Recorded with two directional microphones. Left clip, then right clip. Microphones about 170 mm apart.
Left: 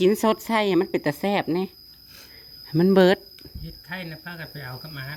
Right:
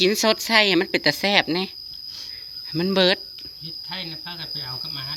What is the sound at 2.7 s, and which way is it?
Speech, 30° left (ahead or behind).